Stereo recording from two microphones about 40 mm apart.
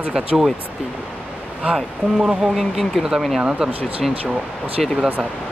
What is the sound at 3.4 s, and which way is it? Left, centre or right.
Speech, right.